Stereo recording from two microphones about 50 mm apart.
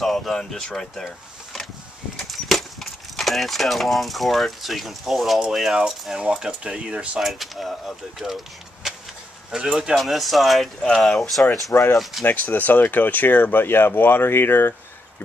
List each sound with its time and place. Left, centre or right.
0.0 s a sound: centre
0.4 s speech: centre
1.0 s vehicle: centre
2.2 s speech: centre
6.1 s speech: centre
7.2 s speech: centre
8.8 s a sound: centre
9.5 s speech: centre
9.9 s speech: centre
11.7 s speech: left
12.0 s speech: centre
12.3 s speech: left